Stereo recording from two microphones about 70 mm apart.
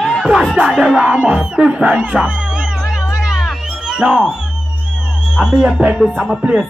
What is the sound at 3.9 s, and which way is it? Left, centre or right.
Speech, centre.